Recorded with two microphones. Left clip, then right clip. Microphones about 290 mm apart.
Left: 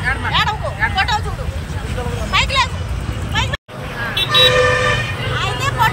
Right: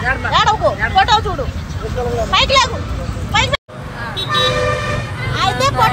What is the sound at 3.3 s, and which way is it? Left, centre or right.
Vehicle, right.